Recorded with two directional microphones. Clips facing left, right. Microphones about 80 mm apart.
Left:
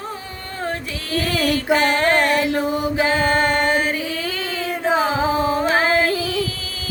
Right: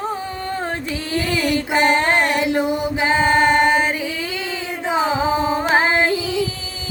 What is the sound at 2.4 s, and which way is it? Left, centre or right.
Chant, centre.